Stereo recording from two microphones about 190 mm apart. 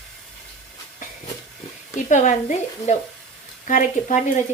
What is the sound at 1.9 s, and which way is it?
A woman's voice, 40° left (ahead or behind).